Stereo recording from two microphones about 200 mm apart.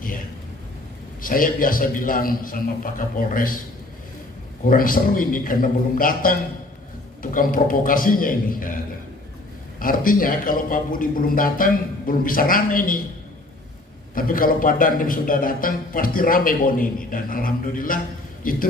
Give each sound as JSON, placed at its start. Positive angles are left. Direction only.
{"t": 1.2, "sound": "a man's voice", "side_deg": 45}
{"t": 4.6, "sound": "a man's voice", "side_deg": 45}
{"t": 9.8, "sound": "a man's voice", "side_deg": 45}
{"t": 14.1, "sound": "a man's voice", "side_deg": 45}